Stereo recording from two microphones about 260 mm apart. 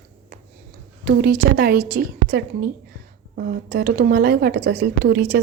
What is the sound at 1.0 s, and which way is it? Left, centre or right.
A woman's voice, right.